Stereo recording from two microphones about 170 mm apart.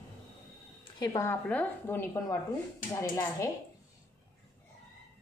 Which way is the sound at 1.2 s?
10° left (ahead or behind).